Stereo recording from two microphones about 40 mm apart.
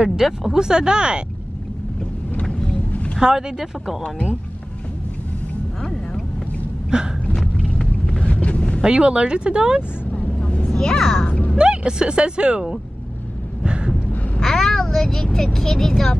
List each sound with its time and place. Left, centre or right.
0.0 s speech: centre
2.4 s vehicle: centre
3.2 s speech: centre
5.8 s vehicle: centre
6.9 s speech: right
7.3 s vehicle: centre
8.3 s a sound: left
8.8 s speech: right
10.1 s vehicle: left
10.7 s a child's voice: centre
11.5 s speech: right
13.7 s a sound: right
14.4 s a child's voice: centre